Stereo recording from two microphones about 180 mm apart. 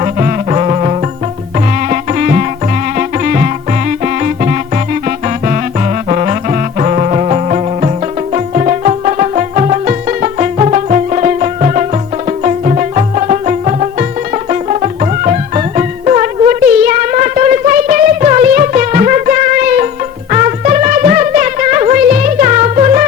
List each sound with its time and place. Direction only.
0.0 s music: 35° right (ahead or behind)
1.9 s music: 50° right (ahead or behind)
6.1 s music: 40° right (ahead or behind)